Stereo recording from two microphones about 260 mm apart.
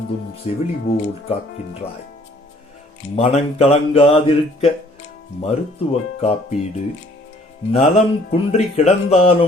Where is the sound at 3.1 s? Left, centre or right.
Left.